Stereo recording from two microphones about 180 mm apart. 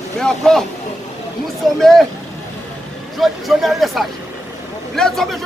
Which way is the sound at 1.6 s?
Centre (ahead or behind).